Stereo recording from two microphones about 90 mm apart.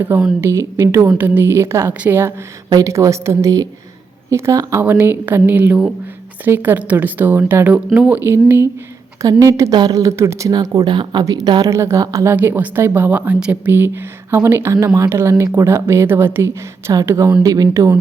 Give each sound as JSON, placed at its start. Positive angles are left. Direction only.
{"t": 0.1, "sound": "a woman's voice", "side_deg": -25}
{"t": 1.2, "sound": "speech", "side_deg": -20}
{"t": 2.6, "sound": "a woman's voice", "side_deg": -40}
{"t": 9.2, "sound": "a woman's voice", "side_deg": -35}
{"t": 9.7, "sound": "a woman's voice", "side_deg": -45}
{"t": 10.5, "sound": "speech", "side_deg": -45}
{"t": 11.3, "sound": "a woman's voice", "side_deg": -40}
{"t": 12.3, "sound": "a woman's voice", "side_deg": -20}
{"t": 17.4, "sound": "a woman's voice", "side_deg": -45}